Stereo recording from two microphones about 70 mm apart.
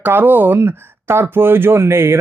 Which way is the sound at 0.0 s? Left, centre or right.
Right.